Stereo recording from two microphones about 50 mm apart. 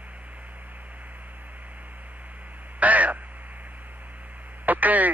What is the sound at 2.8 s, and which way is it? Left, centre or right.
Radio, right.